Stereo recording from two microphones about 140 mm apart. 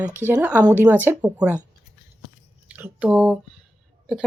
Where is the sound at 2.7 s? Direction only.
10° right (ahead or behind).